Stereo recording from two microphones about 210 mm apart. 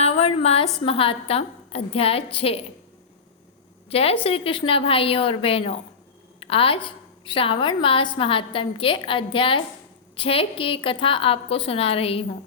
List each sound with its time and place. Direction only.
0.0 s a sound: 30° left (ahead or behind)
0.4 s a woman's voice: 30° left (ahead or behind)
3.8 s a woman's voice: 30° left (ahead or behind)